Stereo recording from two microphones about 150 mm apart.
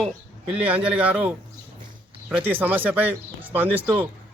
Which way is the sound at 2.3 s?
15° right (ahead or behind).